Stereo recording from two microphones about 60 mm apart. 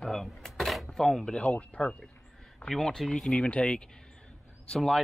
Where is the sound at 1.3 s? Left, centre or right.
Centre.